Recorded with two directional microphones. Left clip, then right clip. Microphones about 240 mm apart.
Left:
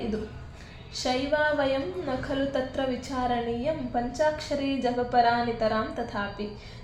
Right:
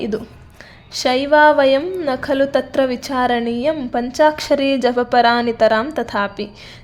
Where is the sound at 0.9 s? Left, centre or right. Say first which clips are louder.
Right 13 dB; right.